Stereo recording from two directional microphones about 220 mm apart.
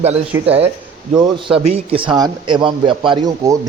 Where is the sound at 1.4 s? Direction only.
25° right (ahead or behind).